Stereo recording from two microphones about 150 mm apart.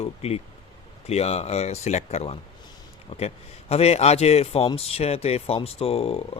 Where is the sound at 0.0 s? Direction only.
45° left (ahead or behind).